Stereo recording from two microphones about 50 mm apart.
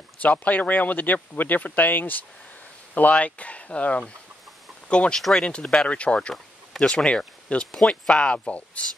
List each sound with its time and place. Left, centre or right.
0.2 s speech: left
3.0 s speech: left
6.3 s a sound: centre
7.1 s speech: left
8.5 s speech: left